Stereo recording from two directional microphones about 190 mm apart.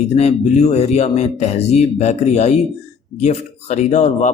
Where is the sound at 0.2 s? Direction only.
35° left (ahead or behind).